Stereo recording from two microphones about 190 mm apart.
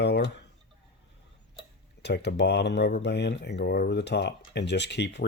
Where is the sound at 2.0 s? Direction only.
60° left (ahead or behind).